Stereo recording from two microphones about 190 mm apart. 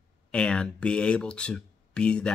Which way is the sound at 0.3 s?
5° left (ahead or behind).